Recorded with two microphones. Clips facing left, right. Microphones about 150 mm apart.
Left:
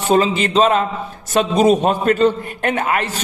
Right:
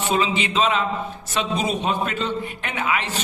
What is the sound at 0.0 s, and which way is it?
A man's voice, 40° left (ahead or behind).